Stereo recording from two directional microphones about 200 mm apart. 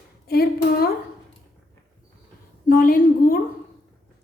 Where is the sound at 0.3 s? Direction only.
50° left (ahead or behind).